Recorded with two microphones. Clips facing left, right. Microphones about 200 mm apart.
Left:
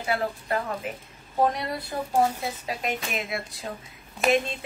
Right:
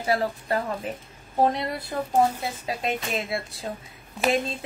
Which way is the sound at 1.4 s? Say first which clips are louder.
Right 1 dB; 25° right (ahead or behind).